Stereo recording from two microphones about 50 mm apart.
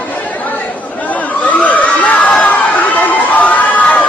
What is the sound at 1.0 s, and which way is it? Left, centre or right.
Chatter, left.